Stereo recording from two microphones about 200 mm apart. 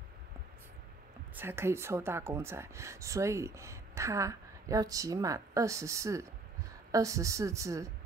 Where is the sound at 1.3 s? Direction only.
10° right (ahead or behind).